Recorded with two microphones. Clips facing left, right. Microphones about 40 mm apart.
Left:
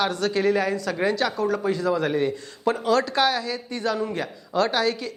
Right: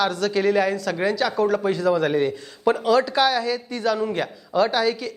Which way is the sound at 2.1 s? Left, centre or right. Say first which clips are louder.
Right 2 dB; centre.